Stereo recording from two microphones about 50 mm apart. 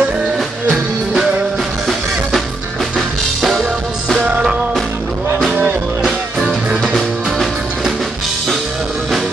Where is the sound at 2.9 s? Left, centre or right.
Centre.